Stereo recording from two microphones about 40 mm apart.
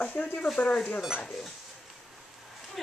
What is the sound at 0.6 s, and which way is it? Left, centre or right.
Speech, left.